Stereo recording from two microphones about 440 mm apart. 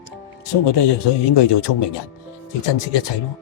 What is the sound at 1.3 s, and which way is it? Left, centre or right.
Speech, left.